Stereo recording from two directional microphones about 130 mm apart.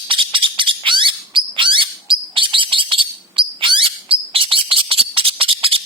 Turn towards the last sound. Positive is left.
turn(degrees=-45)  # may be behind; listen again after turning